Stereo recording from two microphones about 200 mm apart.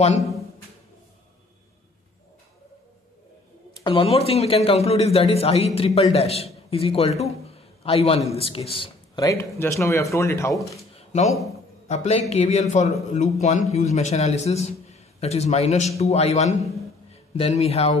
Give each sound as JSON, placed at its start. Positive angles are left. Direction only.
{"t": 3.8, "sound": "a man's voice", "side_deg": 25}
{"t": 11.0, "sound": "a sound", "side_deg": 35}
{"t": 11.9, "sound": "a man's voice", "side_deg": 30}